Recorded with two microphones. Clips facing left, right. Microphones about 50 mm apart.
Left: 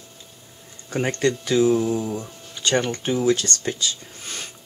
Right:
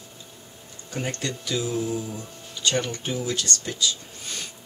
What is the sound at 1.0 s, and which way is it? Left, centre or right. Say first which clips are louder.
Speech: left 8 dB; left.